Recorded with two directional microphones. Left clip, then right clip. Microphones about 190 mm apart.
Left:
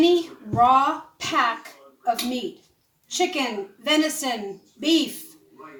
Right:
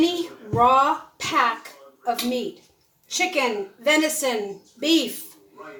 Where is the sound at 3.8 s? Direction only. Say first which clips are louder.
Right 2 dB; 15° right (ahead or behind).